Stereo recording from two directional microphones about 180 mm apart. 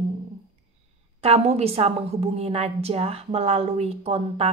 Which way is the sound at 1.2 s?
35° right (ahead or behind).